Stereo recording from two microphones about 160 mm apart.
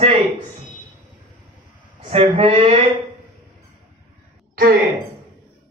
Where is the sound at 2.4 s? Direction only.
35° right (ahead or behind).